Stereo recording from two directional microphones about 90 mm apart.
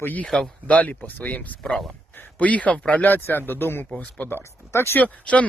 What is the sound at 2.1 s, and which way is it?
Speech, 20° left (ahead or behind).